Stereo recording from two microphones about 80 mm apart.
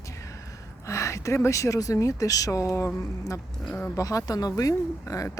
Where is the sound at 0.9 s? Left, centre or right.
Left.